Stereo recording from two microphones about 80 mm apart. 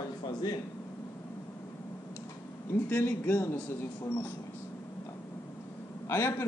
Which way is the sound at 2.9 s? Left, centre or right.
Centre.